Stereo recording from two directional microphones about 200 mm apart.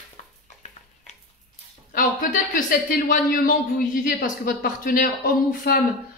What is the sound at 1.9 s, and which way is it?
Speech, 40° left (ahead or behind).